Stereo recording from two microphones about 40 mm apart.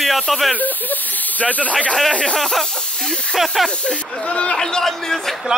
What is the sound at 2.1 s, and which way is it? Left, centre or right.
Speech, left.